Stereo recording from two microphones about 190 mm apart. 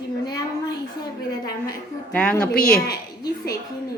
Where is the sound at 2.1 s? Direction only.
5° left (ahead or behind).